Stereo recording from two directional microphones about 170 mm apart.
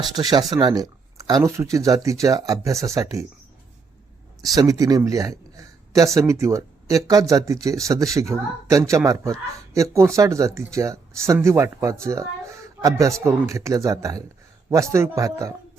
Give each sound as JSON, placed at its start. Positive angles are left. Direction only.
{"t": 0.1, "sound": "speech", "side_deg": -25}
{"t": 4.4, "sound": "speech", "side_deg": -20}